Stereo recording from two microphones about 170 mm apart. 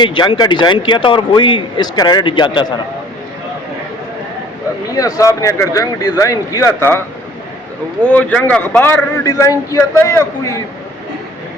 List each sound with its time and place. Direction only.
0.0 s a man's voice: 30° left (ahead or behind)
4.9 s a man's voice: 20° left (ahead or behind)
8.0 s speech: 5° left (ahead or behind)